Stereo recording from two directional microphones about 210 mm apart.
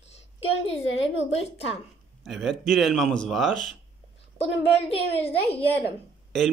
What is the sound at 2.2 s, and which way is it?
Speech, centre (ahead or behind).